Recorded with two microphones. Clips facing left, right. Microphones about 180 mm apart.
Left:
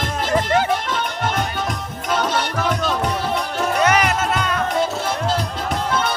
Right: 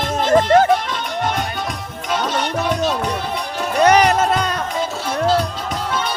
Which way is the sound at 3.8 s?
35° right (ahead or behind).